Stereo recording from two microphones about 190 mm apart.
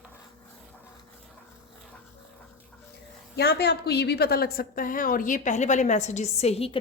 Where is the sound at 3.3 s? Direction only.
60° left (ahead or behind).